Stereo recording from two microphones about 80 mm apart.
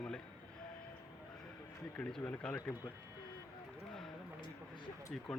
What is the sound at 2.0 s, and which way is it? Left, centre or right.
Speech, centre.